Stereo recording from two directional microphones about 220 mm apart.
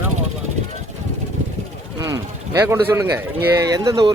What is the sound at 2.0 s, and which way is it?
Speech, 15° right (ahead or behind).